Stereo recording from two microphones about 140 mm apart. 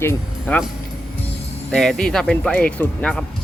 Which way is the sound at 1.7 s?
Centre (ahead or behind).